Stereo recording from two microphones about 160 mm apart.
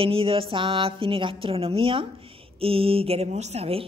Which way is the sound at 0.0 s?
35° right (ahead or behind).